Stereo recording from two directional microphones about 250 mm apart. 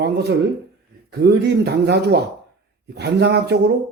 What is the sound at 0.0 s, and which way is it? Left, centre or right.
Speech, right.